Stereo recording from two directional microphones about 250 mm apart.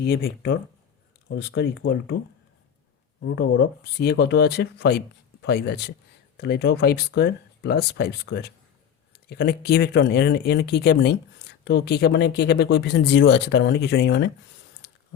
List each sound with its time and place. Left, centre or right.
0.0 s speech: left
3.2 s speech: left